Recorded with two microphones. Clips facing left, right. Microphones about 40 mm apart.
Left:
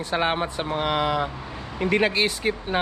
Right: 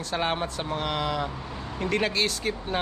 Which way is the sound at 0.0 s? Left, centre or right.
Centre.